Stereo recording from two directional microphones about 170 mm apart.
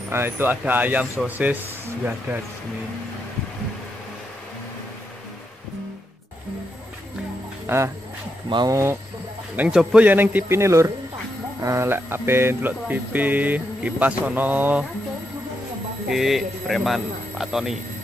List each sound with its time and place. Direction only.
0.1 s speech: 10° right (ahead or behind)
7.6 s speech: 15° right (ahead or behind)
9.6 s speech: 5° right (ahead or behind)
16.1 s speech: centre (ahead or behind)